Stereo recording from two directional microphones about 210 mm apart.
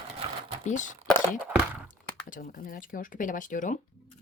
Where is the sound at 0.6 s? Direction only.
35° left (ahead or behind).